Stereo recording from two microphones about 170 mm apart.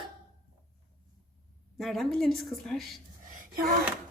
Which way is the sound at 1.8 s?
Centre (ahead or behind).